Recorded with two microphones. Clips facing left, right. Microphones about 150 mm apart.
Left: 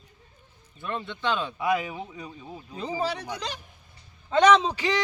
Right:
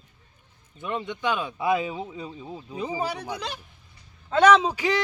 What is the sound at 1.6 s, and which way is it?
A man's voice, 25° right (ahead or behind).